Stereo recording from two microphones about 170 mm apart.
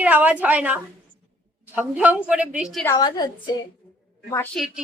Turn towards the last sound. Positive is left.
turn(degrees=0)  # may be behind; listen again after turning